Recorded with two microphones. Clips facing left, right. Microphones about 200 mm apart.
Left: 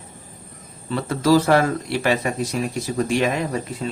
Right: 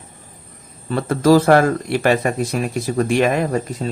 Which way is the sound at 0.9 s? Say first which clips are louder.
Right 4 dB; 50° right (ahead or behind).